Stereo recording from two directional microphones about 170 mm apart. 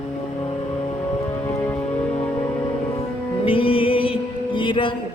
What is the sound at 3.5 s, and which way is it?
Music, 30° left (ahead or behind).